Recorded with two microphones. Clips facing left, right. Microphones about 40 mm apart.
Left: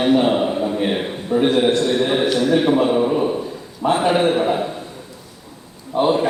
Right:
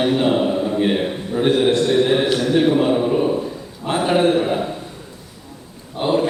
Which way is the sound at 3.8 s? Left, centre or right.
Left.